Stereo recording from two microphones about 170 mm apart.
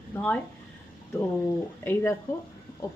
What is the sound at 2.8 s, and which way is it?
Speech, 20° left (ahead or behind).